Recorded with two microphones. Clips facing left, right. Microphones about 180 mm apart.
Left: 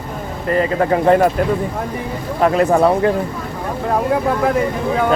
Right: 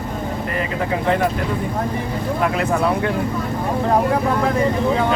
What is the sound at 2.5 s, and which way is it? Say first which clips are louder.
Speech: left 6 dB; 40° left (ahead or behind).